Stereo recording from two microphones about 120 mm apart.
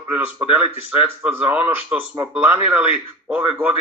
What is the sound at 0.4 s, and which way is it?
A man's voice, 10° right (ahead or behind).